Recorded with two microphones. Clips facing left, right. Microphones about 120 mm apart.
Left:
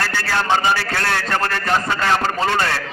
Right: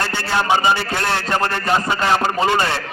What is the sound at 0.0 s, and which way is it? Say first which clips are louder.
A man's voice: right 1 dB; 20° right (ahead or behind).